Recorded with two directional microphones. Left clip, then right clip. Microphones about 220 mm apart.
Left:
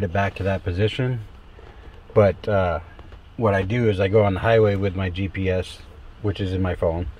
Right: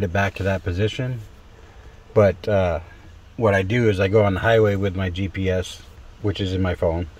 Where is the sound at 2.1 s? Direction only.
20° right (ahead or behind).